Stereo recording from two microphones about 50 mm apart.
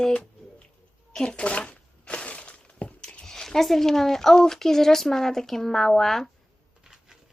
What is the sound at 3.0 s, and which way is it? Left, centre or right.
Speech, centre.